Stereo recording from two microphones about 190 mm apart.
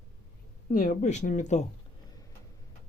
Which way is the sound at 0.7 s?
45° left (ahead or behind).